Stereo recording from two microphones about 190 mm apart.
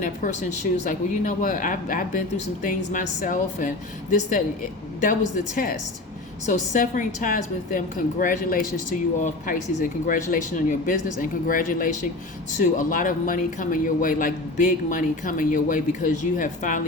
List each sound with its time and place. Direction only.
0.0 s a woman's voice: 45° left (ahead or behind)
6.5 s speech: 45° left (ahead or behind)